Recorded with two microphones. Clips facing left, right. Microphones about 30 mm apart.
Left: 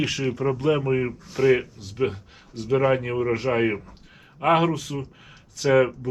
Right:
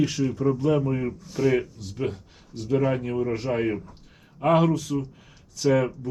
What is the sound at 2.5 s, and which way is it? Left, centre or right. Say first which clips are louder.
Speech: left 3 dB; left.